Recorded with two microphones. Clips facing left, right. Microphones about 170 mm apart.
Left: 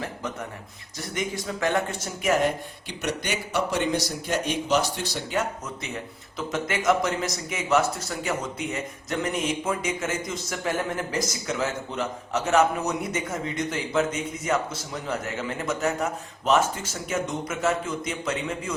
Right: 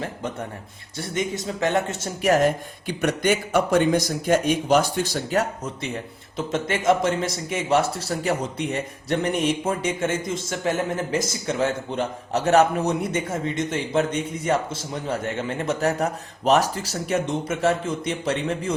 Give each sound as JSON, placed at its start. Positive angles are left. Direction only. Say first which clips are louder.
{"t": 0.9, "sound": "a man's voice", "louder": "right 4 dB", "side_deg": -25}
{"t": 2.2, "sound": "speech", "louder": "right 4 dB", "side_deg": -40}
{"t": 6.3, "sound": "a man's voice", "louder": "right 3 dB", "side_deg": -25}